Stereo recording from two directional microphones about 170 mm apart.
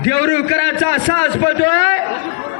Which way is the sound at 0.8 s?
30° left (ahead or behind).